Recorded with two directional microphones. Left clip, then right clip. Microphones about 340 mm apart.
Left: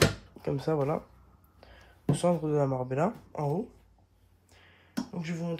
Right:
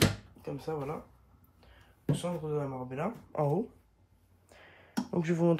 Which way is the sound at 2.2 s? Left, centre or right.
Centre.